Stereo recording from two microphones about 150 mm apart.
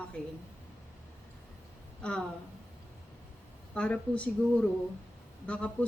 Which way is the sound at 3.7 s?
10° left (ahead or behind).